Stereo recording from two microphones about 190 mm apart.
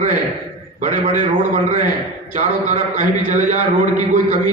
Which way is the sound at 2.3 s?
40° right (ahead or behind).